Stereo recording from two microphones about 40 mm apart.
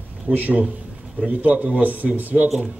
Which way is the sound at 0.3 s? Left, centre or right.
Right.